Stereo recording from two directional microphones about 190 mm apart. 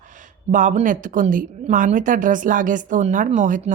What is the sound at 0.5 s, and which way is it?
A woman's voice, 40° right (ahead or behind).